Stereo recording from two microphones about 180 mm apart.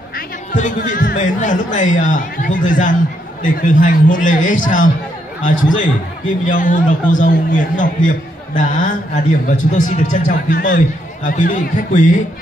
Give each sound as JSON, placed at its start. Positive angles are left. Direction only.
{"t": 0.5, "sound": "speech", "side_deg": 45}